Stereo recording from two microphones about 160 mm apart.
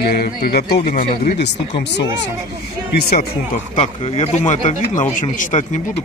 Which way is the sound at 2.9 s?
80° left.